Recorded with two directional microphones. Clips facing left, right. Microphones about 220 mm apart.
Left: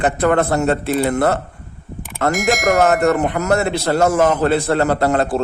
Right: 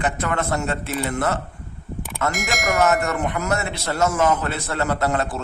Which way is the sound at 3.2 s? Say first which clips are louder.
Left 6 dB; 35° left (ahead or behind).